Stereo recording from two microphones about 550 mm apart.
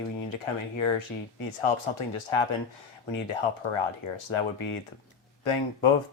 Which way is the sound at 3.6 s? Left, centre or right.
Left.